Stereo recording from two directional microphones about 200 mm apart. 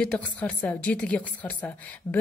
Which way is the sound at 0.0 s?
5° left (ahead or behind).